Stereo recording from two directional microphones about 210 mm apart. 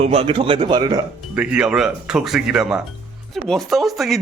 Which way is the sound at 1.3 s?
5° right (ahead or behind).